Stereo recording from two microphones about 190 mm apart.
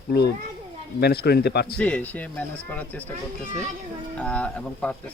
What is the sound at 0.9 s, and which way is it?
Speech, 60° left (ahead or behind).